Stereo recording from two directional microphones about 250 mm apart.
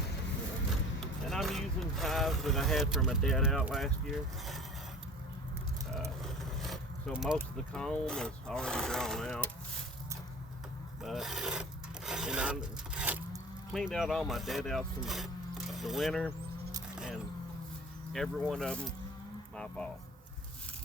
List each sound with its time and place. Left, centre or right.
1.3 s speech: centre
6.2 s speech: centre
11.0 s speech: centre
12.0 s rub: centre
13.7 s speech: centre
16.9 s vehicle: centre
18.1 s speech: centre